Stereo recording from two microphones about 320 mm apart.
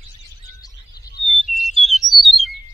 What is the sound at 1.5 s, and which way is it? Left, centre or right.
Chirp, centre.